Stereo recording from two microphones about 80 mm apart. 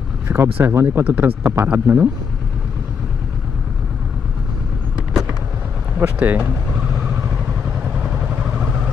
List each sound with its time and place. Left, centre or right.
0.3 s speech: right
5.9 s speech: right
7.0 s vehicle: centre